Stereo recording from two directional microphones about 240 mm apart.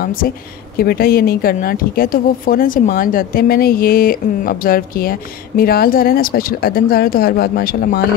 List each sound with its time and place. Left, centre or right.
0.7 s a woman's voice: left